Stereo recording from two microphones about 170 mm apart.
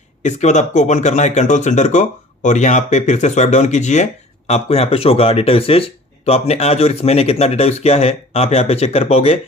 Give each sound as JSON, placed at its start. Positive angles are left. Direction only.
{"t": 0.2, "sound": "speech", "side_deg": 45}